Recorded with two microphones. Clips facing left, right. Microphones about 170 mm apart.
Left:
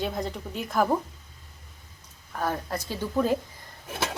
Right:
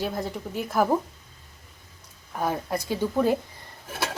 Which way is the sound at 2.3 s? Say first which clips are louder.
Right 2 dB; 10° right (ahead or behind).